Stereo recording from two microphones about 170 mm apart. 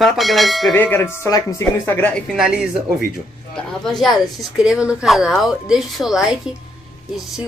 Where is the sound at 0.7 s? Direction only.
15° left (ahead or behind).